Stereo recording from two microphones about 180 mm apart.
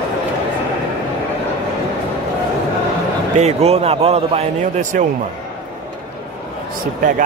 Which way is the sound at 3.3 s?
35° right (ahead or behind).